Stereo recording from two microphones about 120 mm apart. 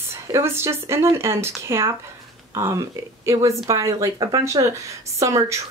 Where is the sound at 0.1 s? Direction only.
20° right (ahead or behind).